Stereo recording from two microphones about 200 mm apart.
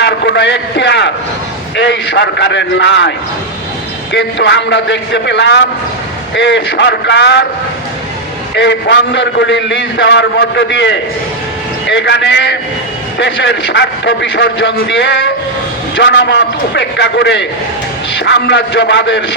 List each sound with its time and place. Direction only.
0.0 s a sound: 60° left (ahead or behind)
1.7 s a man's voice: 60° left (ahead or behind)
4.1 s a man's voice: 60° left (ahead or behind)
8.5 s a man's voice: 60° left (ahead or behind)